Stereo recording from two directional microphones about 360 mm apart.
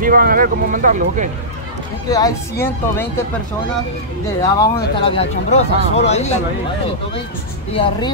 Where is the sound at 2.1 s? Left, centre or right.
Centre.